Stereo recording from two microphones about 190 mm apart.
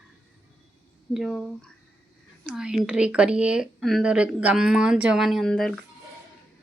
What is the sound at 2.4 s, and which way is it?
Speech, 5° right (ahead or behind).